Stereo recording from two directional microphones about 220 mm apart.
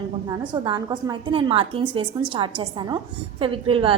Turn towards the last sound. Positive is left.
turn(degrees=-25)  # may be behind; listen again after turning